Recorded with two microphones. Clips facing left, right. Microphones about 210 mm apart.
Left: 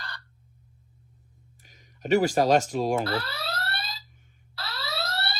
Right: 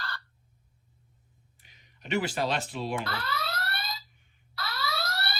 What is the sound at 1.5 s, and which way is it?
Speech, 45° left (ahead or behind).